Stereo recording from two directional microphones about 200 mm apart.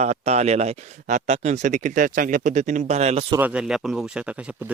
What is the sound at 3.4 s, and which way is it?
Speech, 5° right (ahead or behind).